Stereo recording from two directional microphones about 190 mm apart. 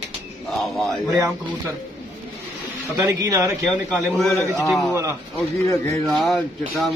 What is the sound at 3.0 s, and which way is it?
Speech, 15° right (ahead or behind).